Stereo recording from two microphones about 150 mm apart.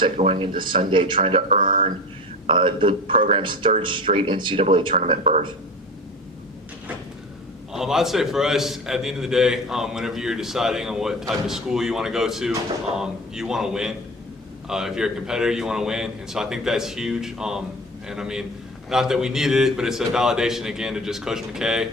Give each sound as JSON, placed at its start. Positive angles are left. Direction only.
{"t": 0.2, "sound": "a man's voice", "side_deg": -40}
{"t": 1.5, "sound": "speech", "side_deg": -70}
{"t": 2.5, "sound": "a man's voice", "side_deg": -35}
{"t": 7.7, "sound": "a man's voice", "side_deg": 0}